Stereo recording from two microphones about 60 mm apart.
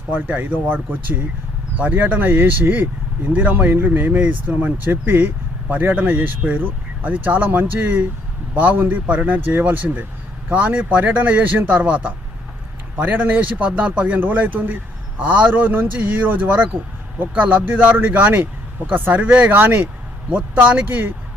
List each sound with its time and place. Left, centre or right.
0.1 s speech: right
19.5 s speech: right
20.3 s speech: right
20.8 s speech: right